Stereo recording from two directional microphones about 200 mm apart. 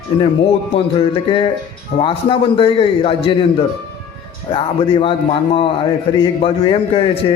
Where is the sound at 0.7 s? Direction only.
25° left (ahead or behind).